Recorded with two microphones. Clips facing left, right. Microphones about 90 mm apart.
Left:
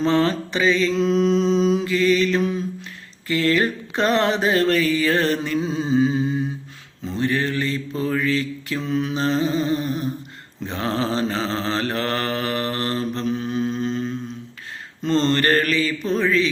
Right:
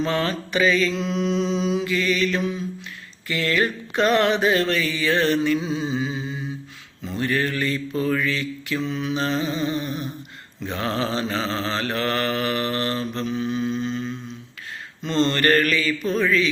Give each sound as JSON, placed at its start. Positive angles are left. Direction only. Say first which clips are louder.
{"t": 0.0, "sound": "mantra", "louder": "left 4 dB", "side_deg": 30}
{"t": 7.0, "sound": "mantra", "louder": "left 1 dB", "side_deg": 25}